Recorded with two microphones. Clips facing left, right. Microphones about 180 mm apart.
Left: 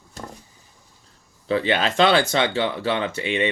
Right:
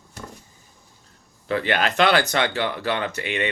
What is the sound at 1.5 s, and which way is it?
Speech, 25° left (ahead or behind).